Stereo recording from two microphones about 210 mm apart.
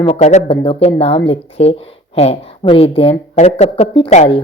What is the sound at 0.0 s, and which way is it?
Speech, 30° left (ahead or behind).